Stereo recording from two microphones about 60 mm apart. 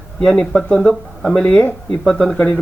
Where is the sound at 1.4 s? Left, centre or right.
Left.